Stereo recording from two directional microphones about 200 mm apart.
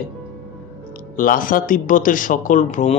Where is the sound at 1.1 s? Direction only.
45° left (ahead or behind).